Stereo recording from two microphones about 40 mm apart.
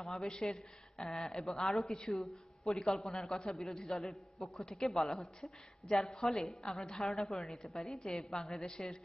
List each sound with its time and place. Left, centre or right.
0.0 s a man's voice: centre
2.0 s a woman's voice: centre
2.6 s a man's voice: centre
5.2 s a woman's voice: centre